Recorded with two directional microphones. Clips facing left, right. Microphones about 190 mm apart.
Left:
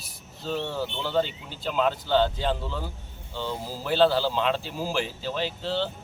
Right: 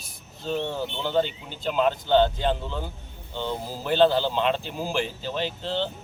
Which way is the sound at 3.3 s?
20° right (ahead or behind).